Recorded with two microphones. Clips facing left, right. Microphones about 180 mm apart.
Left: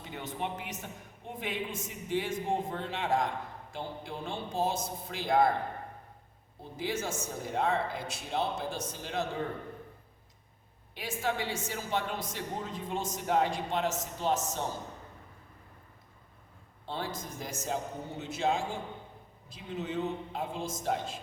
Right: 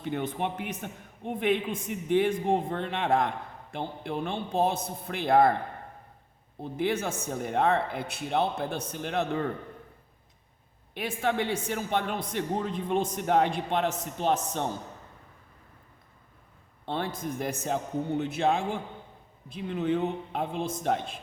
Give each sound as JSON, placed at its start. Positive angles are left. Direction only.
{"t": 0.0, "sound": "a man's voice", "side_deg": -55}
{"t": 6.6, "sound": "a man's voice", "side_deg": -60}
{"t": 10.9, "sound": "a man's voice", "side_deg": -60}
{"t": 16.8, "sound": "a man's voice", "side_deg": -60}